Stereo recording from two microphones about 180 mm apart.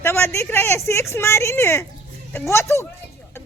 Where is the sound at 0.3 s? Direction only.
15° left (ahead or behind).